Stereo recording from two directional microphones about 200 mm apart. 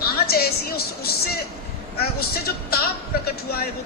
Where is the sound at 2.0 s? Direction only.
50° left (ahead or behind).